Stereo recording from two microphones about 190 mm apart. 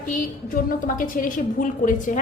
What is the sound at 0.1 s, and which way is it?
A woman's voice, 45° left (ahead or behind).